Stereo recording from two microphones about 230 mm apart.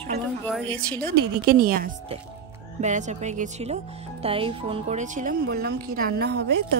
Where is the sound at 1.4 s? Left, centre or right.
Right.